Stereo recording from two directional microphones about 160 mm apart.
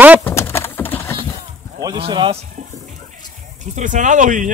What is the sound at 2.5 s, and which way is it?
Music, 50° right (ahead or behind).